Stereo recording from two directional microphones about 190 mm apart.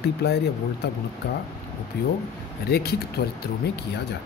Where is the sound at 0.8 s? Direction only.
60° left (ahead or behind).